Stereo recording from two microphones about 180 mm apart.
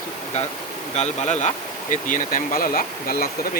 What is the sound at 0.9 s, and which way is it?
Speech, 40° left (ahead or behind).